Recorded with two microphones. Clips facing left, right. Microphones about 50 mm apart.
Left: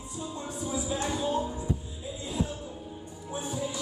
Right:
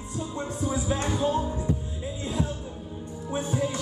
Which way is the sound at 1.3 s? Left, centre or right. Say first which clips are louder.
Right 3 dB; centre.